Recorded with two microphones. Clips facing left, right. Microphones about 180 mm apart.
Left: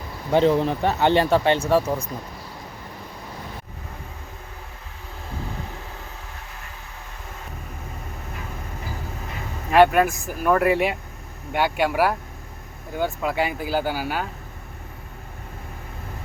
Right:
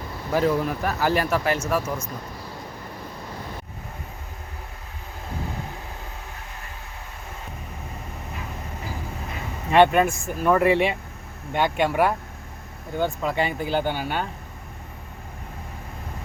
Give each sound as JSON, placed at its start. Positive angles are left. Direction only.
{"t": 0.3, "sound": "speech", "side_deg": 25}
{"t": 9.7, "sound": "speech", "side_deg": 5}